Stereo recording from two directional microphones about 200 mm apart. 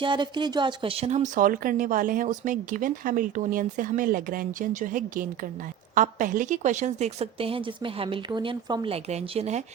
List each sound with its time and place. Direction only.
0.0 s speech: 25° right (ahead or behind)